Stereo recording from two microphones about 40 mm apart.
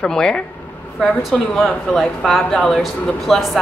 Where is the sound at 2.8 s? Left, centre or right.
Centre.